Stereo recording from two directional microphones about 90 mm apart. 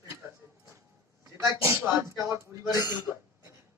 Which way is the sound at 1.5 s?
30° right (ahead or behind).